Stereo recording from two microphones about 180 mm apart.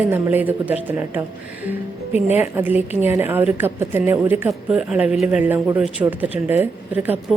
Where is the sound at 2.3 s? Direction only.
10° right (ahead or behind).